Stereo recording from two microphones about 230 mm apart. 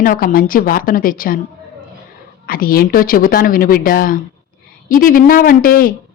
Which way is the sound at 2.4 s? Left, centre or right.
Left.